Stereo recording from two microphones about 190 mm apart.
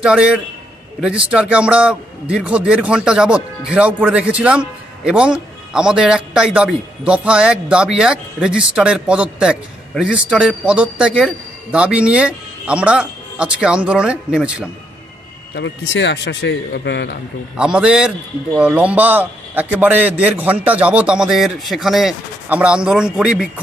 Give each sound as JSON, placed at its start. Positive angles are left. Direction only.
{"t": 0.0, "sound": "speech", "side_deg": -5}
{"t": 15.5, "sound": "a man's voice", "side_deg": 70}
{"t": 17.6, "sound": "a man's voice", "side_deg": -5}